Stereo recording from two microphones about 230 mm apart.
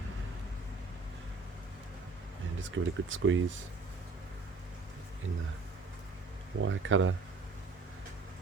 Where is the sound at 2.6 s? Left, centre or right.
Right.